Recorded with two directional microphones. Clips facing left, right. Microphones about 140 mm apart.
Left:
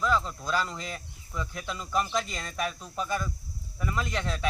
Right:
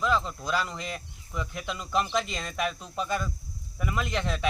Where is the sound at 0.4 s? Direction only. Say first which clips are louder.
Even; 10° right (ahead or behind).